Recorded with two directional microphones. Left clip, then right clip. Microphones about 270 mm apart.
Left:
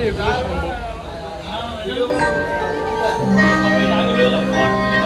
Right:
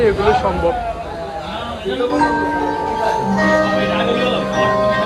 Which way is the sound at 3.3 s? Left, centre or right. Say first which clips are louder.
Right 1 dB; right.